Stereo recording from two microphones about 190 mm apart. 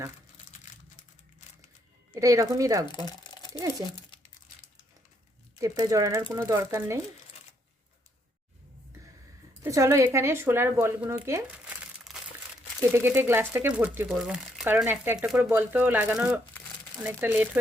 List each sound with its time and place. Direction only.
2.1 s speech: 15° right (ahead or behind)
2.8 s speech: 20° left (ahead or behind)
3.5 s speech: 15° right (ahead or behind)
5.5 s speech: 20° right (ahead or behind)
9.6 s speech: 15° right (ahead or behind)